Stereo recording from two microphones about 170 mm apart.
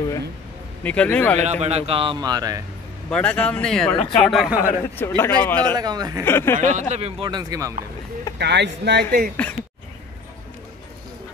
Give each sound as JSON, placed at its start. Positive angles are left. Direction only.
{"t": 0.8, "sound": "a man's voice", "side_deg": 10}
{"t": 1.4, "sound": "a man's voice", "side_deg": -40}
{"t": 3.1, "sound": "speech", "side_deg": 5}
{"t": 4.6, "sound": "a man's voice", "side_deg": 15}
{"t": 5.8, "sound": "speech", "side_deg": -25}
{"t": 6.2, "sound": "a man's voice", "side_deg": 15}
{"t": 6.6, "sound": "speech", "side_deg": -45}
{"t": 8.4, "sound": "speech", "side_deg": -85}